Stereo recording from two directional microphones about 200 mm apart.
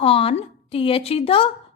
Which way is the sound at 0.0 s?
30° left (ahead or behind).